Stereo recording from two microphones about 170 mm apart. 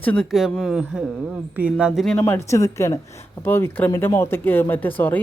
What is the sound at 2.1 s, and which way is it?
Speech, 15° left (ahead or behind).